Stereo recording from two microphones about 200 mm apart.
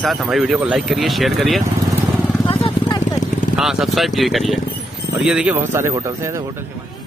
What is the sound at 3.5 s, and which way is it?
Speech, centre (ahead or behind).